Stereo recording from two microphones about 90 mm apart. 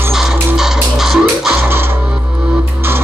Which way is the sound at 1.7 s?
25° right (ahead or behind).